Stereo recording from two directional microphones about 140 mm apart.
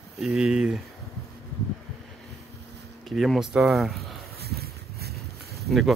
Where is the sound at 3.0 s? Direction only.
Centre (ahead or behind).